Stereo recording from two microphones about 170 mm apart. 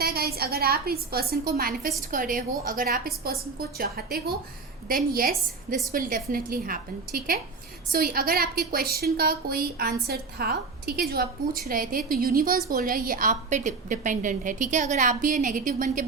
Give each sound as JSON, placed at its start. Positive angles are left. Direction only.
{"t": 0.0, "sound": "a woman's voice", "side_deg": -65}